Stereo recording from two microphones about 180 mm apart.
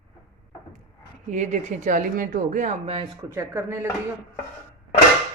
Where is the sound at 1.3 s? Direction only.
40° right (ahead or behind).